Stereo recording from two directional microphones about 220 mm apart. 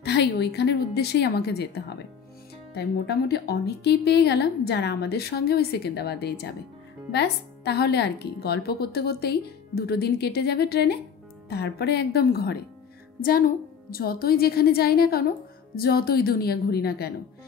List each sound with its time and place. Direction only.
0.0 s a woman's voice: 50° left (ahead or behind)